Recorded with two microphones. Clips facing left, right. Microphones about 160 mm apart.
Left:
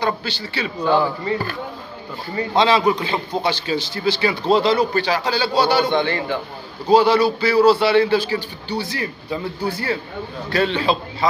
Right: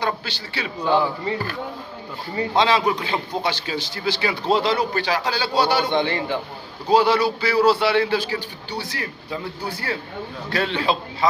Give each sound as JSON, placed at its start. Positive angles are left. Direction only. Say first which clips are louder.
{"t": 0.0, "sound": "a man's voice", "louder": "left 3 dB", "side_deg": -5}
{"t": 0.8, "sound": "speech", "louder": "left 2 dB", "side_deg": -25}
{"t": 2.5, "sound": "a man's voice", "louder": "left 3 dB", "side_deg": 0}
{"t": 5.9, "sound": "speech", "louder": "left 1 dB", "side_deg": -25}
{"t": 6.9, "sound": "a man's voice", "louder": "left 3 dB", "side_deg": -5}